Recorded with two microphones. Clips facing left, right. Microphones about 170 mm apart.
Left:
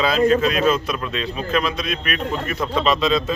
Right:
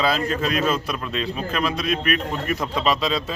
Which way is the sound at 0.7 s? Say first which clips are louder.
Left 2 dB; 5° right (ahead or behind).